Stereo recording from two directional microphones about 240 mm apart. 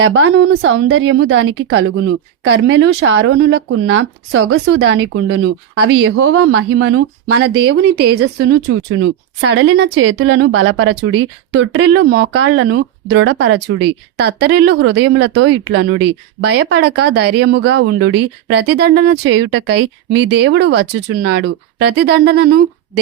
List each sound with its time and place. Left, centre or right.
0.0 s a woman's voice: right